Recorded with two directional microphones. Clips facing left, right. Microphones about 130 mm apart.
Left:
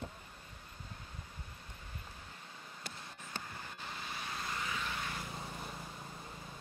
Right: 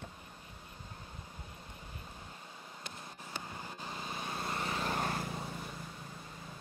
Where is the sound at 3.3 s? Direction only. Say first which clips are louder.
Right 2 dB; 20° right (ahead or behind).